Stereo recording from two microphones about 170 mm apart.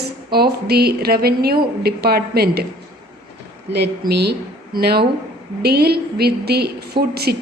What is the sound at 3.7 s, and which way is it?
A woman's voice, 75° right (ahead or behind).